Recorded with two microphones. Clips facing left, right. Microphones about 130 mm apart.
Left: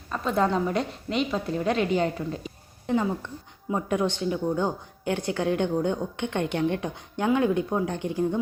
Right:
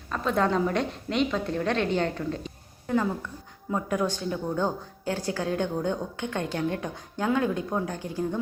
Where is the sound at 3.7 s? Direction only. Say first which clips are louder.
Left 1 dB; 25° left (ahead or behind).